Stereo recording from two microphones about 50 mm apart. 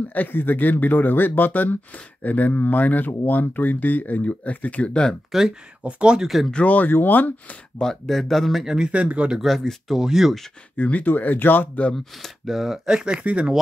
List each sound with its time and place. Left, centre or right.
0.1 s speech: left
5.3 s speech: centre
5.9 s speech: right
6.2 s speech: centre
6.5 s speech: left
7.8 s speech: centre
8.6 s speech: centre
8.9 s speech: right
9.4 s speech: centre
10.8 s speech: left
12.4 s speech: centre; by 13.5 s right